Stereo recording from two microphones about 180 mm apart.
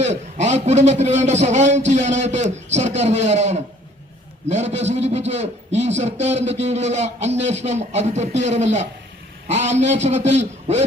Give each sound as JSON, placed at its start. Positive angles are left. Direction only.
{"t": 0.0, "sound": "a man's voice", "side_deg": -40}